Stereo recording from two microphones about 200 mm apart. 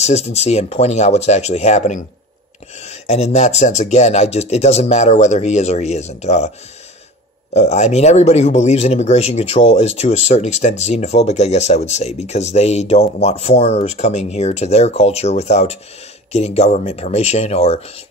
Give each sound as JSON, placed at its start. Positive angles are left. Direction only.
{"t": 0.0, "sound": "speech", "side_deg": 35}
{"t": 7.5, "sound": "speech", "side_deg": 35}